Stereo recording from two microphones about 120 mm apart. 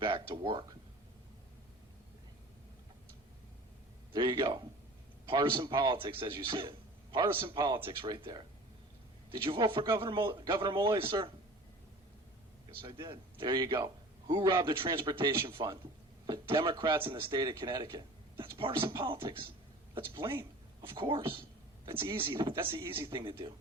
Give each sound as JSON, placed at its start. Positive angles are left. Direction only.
{"t": 0.0, "sound": "a sound", "side_deg": -45}
{"t": 4.1, "sound": "a man's voice", "side_deg": -40}
{"t": 13.4, "sound": "a man's voice", "side_deg": -40}